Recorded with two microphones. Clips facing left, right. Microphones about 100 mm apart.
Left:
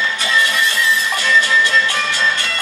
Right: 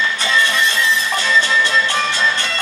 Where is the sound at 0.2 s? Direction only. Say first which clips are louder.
Even; 30° right (ahead or behind).